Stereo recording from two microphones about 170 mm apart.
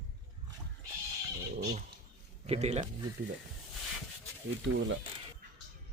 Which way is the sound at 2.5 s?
40° right (ahead or behind).